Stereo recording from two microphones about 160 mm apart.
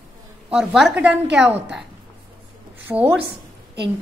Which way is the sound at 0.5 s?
5° right (ahead or behind).